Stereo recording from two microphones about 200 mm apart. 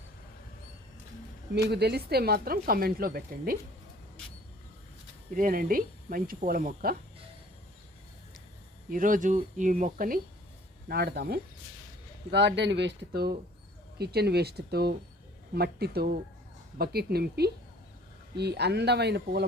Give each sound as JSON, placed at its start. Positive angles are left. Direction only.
{"t": 1.5, "sound": "speech", "side_deg": -55}
{"t": 5.4, "sound": "speech", "side_deg": -45}
{"t": 8.9, "sound": "speech", "side_deg": -40}
{"t": 10.8, "sound": "speech", "side_deg": -55}